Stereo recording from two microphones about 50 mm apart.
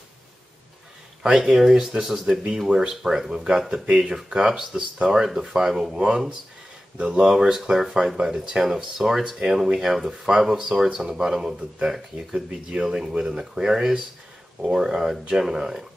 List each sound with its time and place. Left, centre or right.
1.4 s speech: centre
5.9 s speech: centre
7.2 s speech: centre
12.4 s speech: right
12.8 s speech: centre